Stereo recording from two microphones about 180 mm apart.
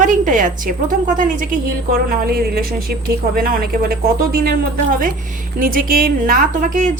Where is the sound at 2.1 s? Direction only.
60° right (ahead or behind).